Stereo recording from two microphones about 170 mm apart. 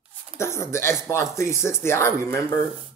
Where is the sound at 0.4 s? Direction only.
15° left (ahead or behind).